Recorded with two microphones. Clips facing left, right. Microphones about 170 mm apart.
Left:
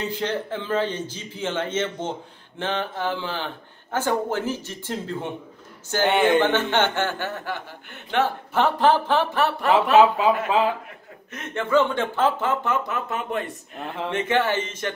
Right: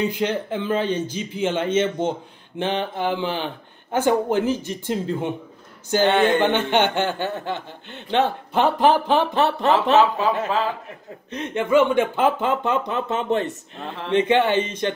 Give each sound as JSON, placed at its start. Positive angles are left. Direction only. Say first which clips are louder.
{"t": 0.0, "sound": "speech", "louder": "right 4 dB", "side_deg": -15}
{"t": 6.0, "sound": "speech", "louder": "even", "side_deg": 15}
{"t": 6.4, "sound": "speech", "louder": "right 2 dB", "side_deg": -15}
{"t": 9.9, "sound": "speech", "louder": "left 2 dB", "side_deg": 15}
{"t": 11.3, "sound": "speech", "louder": "right 3 dB", "side_deg": -15}